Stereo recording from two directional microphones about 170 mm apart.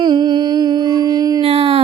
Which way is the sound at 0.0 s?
25° right (ahead or behind).